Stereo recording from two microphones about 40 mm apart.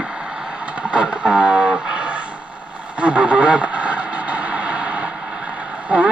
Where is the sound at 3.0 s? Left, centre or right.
Right.